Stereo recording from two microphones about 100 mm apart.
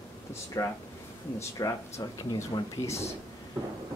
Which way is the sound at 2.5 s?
50° left (ahead or behind).